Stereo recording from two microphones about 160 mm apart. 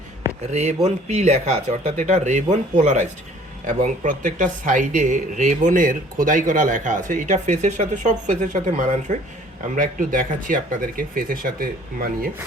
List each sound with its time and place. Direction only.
0.5 s speech: 45° right (ahead or behind); by 12.0 s 65° right (ahead or behind)